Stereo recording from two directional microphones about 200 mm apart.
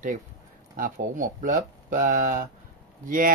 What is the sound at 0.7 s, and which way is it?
Speech, 45° right (ahead or behind).